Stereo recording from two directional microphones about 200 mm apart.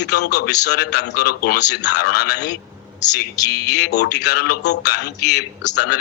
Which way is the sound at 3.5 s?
55° left (ahead or behind).